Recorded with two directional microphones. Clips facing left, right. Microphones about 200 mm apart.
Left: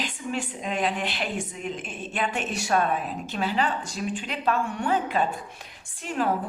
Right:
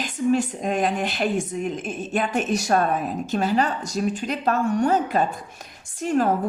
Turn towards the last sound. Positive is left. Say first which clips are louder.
# right 6 dB
turn(degrees=-45)  # may be behind; listen again after turning